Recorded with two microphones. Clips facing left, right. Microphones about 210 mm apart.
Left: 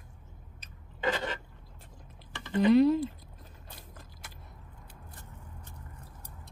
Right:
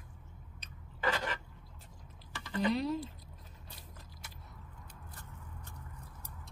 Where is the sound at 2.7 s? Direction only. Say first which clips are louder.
Left 12 dB; 55° left (ahead or behind).